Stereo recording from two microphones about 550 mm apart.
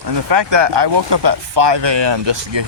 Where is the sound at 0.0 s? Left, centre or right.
Right.